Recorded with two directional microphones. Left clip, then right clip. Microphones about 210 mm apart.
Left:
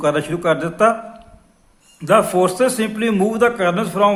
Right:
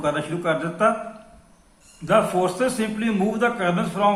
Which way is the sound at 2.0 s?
50° left (ahead or behind).